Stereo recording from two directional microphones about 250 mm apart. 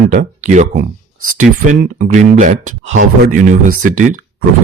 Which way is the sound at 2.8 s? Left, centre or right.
Right.